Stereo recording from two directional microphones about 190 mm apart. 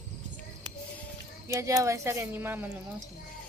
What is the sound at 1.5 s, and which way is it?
Speech, 15° right (ahead or behind).